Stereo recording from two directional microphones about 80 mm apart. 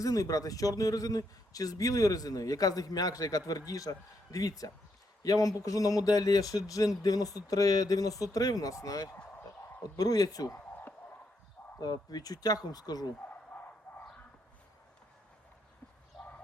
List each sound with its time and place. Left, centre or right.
0.0 s speech: left
11.8 s speech: left
13.5 s bow-wow: centre